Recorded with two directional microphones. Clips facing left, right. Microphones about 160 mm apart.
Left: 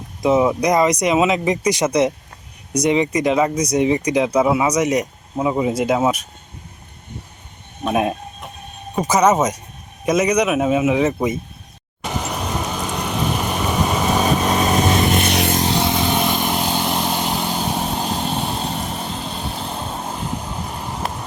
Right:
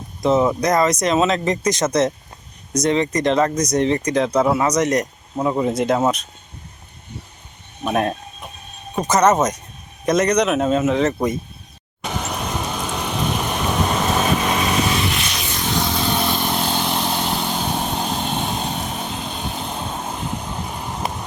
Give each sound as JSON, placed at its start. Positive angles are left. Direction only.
{"t": 0.2, "sound": "speech", "side_deg": 10}
{"t": 9.0, "sound": "speech", "side_deg": 10}
{"t": 12.0, "sound": "vehicle", "side_deg": 0}
{"t": 14.6, "sound": "vehicle", "side_deg": 45}
{"t": 15.5, "sound": "vehicle", "side_deg": 30}